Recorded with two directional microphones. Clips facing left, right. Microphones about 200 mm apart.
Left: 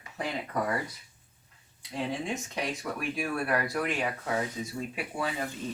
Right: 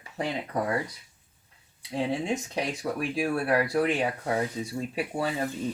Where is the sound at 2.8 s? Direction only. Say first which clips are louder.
Right 5 dB; 25° right (ahead or behind).